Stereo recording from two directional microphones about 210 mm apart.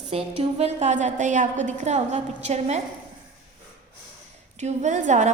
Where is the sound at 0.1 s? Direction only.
30° right (ahead or behind).